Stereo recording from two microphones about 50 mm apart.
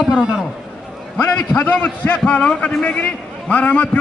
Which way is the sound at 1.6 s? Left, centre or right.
Left.